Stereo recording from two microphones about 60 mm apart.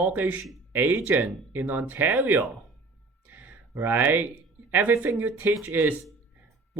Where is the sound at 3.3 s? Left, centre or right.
Right.